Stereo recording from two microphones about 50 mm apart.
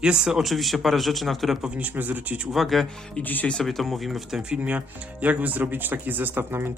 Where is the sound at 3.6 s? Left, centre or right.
Centre.